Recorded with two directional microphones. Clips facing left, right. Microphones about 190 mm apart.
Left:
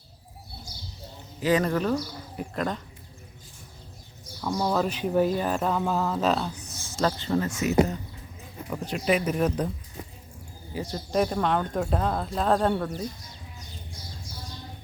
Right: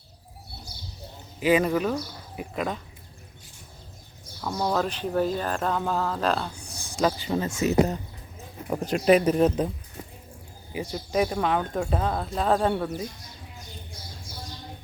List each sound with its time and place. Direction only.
1.4 s speech: 10° right (ahead or behind)
4.4 s speech: 5° right (ahead or behind)
6.5 s speech: 10° right (ahead or behind); by 7.9 s 30° right (ahead or behind)
8.7 s speech: 45° right (ahead or behind)
9.4 s speech: 20° right (ahead or behind)
10.7 s speech: 10° right (ahead or behind)